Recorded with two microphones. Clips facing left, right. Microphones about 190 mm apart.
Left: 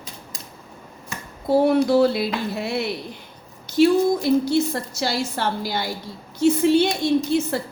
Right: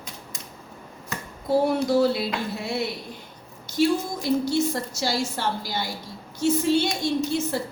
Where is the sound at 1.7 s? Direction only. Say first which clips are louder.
Left 4 dB; 60° left (ahead or behind).